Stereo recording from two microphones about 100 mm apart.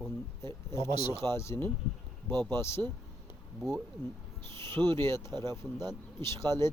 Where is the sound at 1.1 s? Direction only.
25° left (ahead or behind).